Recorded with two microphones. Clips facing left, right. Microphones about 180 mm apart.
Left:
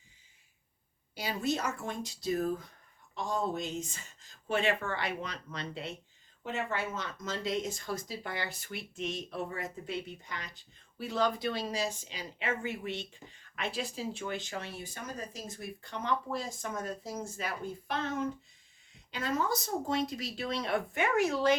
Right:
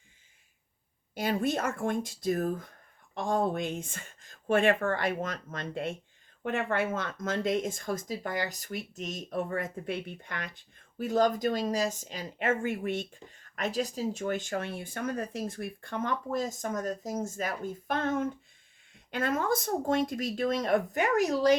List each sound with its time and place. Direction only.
1.1 s speech: 50° right (ahead or behind)